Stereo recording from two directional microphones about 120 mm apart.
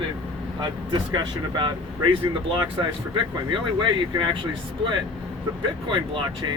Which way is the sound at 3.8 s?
45° right (ahead or behind).